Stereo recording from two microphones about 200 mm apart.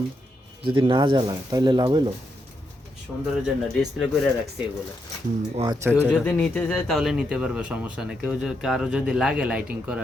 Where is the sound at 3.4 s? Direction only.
Centre (ahead or behind).